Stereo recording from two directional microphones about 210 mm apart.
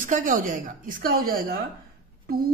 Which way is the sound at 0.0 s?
40° right (ahead or behind).